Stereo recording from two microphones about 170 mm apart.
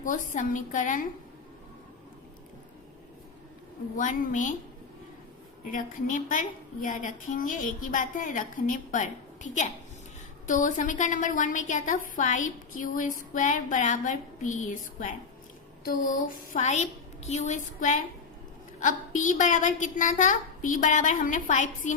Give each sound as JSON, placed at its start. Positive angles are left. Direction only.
{"t": 0.0, "sound": "a woman's voice", "side_deg": 50}
{"t": 3.9, "sound": "a woman's voice", "side_deg": 50}
{"t": 5.6, "sound": "a woman's voice", "side_deg": 50}